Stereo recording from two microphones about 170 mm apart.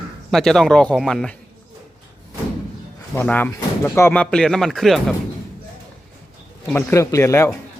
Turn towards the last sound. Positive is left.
turn(degrees=15)  # may be behind; listen again after turning